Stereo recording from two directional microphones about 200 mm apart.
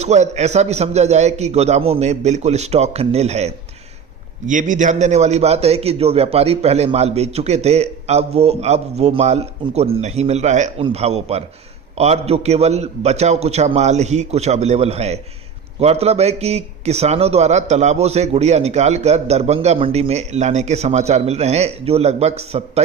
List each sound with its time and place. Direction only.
0.0 s a man's voice: 35° right (ahead or behind)